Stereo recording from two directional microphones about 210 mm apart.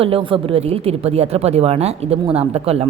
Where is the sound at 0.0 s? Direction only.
25° right (ahead or behind).